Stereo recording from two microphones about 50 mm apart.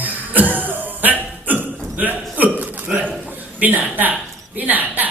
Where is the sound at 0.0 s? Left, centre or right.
Right.